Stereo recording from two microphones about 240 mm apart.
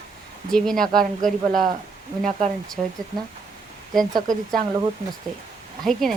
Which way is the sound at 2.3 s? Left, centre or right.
Right.